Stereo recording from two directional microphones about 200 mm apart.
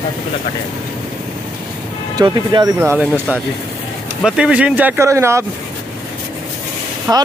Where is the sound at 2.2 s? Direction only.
20° right (ahead or behind).